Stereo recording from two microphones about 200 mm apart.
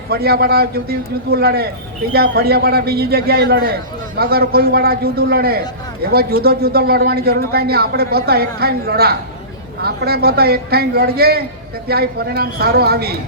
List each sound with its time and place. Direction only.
0.1 s a man's voice: 50° right (ahead or behind)